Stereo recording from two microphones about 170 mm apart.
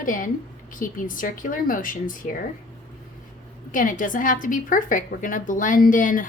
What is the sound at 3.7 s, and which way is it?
A woman's voice, 50° left (ahead or behind).